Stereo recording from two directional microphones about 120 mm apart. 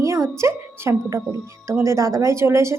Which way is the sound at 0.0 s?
25° right (ahead or behind).